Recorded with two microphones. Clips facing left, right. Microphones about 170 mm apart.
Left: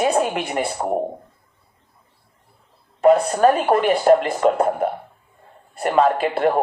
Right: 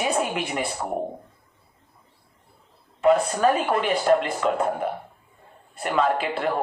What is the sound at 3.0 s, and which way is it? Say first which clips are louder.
Speech: left 5 dB; 40° left (ahead or behind).